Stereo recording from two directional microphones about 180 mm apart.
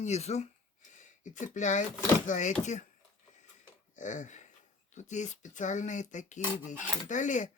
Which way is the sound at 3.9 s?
45° left (ahead or behind).